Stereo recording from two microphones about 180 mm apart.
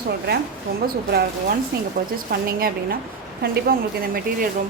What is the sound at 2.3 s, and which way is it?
A woman's voice, 55° right (ahead or behind).